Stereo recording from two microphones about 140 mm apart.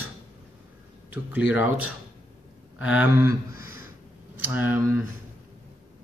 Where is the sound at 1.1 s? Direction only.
10° right (ahead or behind).